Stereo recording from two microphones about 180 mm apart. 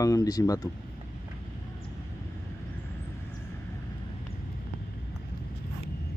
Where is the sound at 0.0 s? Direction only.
20° left (ahead or behind).